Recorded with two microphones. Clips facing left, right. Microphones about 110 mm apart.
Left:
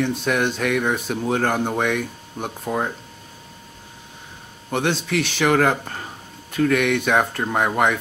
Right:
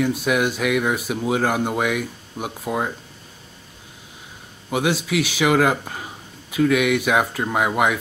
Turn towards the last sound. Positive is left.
turn(degrees=-5)  # may be behind; listen again after turning